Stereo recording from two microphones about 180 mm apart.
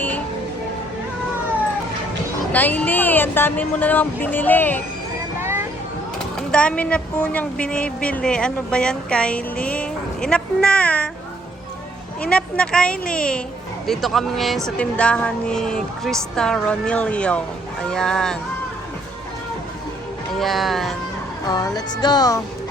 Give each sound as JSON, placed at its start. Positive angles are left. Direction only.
{"t": 2.5, "sound": "a woman's voice", "side_deg": 10}
{"t": 5.4, "sound": "a sound", "side_deg": -15}
{"t": 6.5, "sound": "a woman's voice", "side_deg": 5}
{"t": 12.2, "sound": "a woman's voice", "side_deg": 5}
{"t": 20.4, "sound": "a woman's voice", "side_deg": 0}
{"t": 21.4, "sound": "speech", "side_deg": 20}